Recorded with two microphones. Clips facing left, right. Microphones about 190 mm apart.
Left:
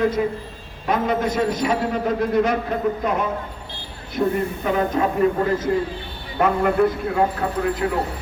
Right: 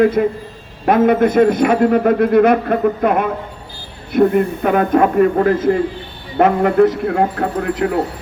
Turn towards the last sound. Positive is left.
turn(degrees=-65)  # may be behind; listen again after turning